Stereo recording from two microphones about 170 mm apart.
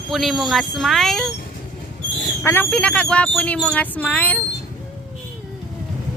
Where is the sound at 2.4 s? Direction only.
15° left (ahead or behind).